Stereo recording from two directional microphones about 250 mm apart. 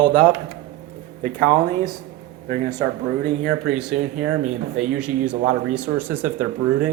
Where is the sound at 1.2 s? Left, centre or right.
Centre.